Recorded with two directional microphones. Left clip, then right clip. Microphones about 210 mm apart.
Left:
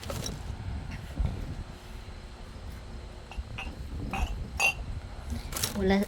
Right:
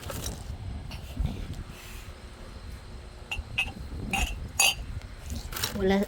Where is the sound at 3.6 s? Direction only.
60° right (ahead or behind).